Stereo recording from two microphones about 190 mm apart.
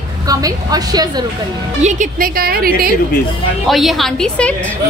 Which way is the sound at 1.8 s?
40° right (ahead or behind).